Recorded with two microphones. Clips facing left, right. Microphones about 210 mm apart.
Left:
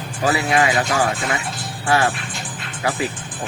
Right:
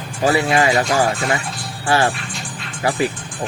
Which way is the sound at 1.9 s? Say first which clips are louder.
Right 1 dB; 30° right (ahead or behind).